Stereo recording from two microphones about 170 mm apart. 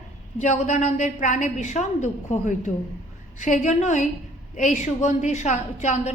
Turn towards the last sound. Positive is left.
turn(degrees=45)  # may be behind; listen again after turning